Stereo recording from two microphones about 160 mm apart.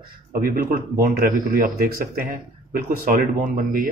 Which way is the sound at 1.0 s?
65° right (ahead or behind).